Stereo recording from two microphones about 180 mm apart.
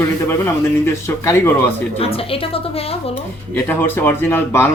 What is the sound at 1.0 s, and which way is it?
Speech, 15° left (ahead or behind).